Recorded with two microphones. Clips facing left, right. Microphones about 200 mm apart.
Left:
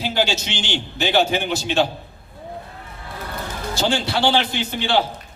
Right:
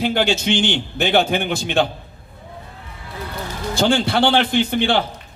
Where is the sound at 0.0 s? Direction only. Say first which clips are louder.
Right 4 dB; 55° right (ahead or behind).